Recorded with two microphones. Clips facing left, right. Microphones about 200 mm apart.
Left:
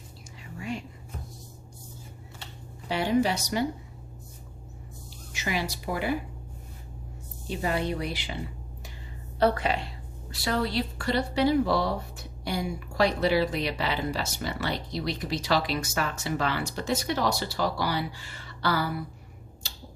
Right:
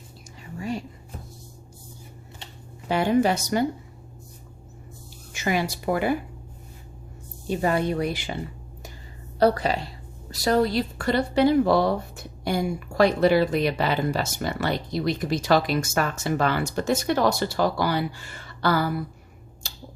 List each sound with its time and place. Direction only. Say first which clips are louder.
0.6 s a sound: right 4 dB; 40° right (ahead or behind)
2.9 s a woman's voice: right 4 dB; 50° right (ahead or behind)
5.3 s speech: right 6 dB; 50° right (ahead or behind)
7.4 s a woman's voice: right 5 dB; 50° right (ahead or behind)
9.4 s a woman's voice: right 4 dB; 40° right (ahead or behind)
19.6 s finger snapping: right 4 dB; 50° right (ahead or behind)